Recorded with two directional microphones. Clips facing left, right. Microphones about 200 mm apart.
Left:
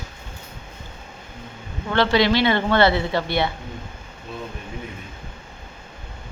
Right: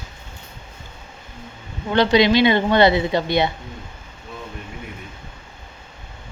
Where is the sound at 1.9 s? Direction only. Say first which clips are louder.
Right 3 dB; 15° right (ahead or behind).